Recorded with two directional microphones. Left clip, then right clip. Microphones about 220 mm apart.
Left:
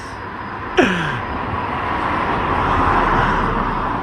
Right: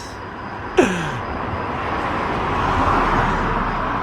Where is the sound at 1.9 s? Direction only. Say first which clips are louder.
Left 3 dB; centre (ahead or behind).